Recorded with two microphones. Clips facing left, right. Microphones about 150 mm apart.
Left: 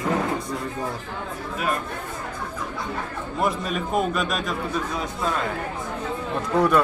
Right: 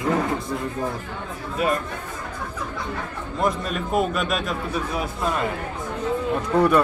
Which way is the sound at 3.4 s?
Centre (ahead or behind).